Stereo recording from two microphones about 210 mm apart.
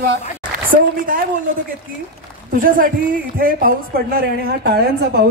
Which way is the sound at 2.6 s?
40° right (ahead or behind).